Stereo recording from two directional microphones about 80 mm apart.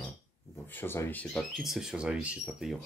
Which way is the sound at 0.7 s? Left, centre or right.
Left.